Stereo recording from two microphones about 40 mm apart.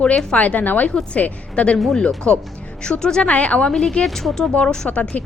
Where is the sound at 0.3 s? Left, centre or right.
Left.